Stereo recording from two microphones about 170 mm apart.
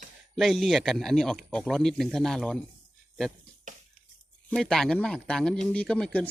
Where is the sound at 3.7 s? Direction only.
50° right (ahead or behind).